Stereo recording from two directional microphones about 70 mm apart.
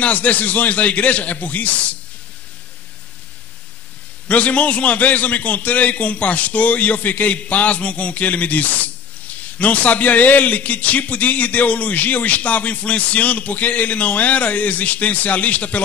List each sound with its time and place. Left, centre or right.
0.0 s a man's voice: left
4.3 s a man's voice: left